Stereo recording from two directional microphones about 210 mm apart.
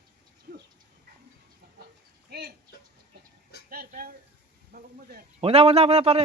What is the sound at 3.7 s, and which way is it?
Speech, 45° right (ahead or behind).